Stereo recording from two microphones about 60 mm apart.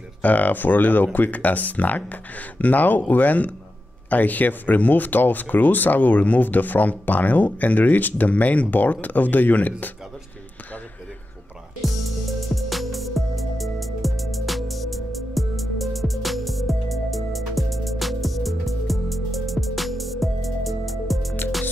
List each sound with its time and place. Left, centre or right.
0.2 s speech: left
11.8 s music: centre